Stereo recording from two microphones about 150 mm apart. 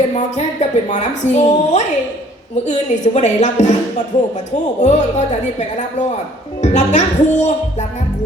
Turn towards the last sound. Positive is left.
turn(degrees=50)  # may be behind; listen again after turning